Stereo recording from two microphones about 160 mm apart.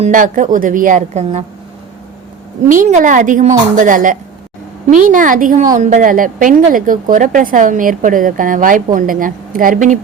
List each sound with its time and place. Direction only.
0.0 s a woman's voice: 55° right (ahead or behind)
2.6 s a woman's voice: 50° right (ahead or behind)